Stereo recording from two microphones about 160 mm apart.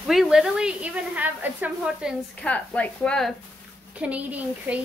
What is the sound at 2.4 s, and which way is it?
Speech, 10° left (ahead or behind).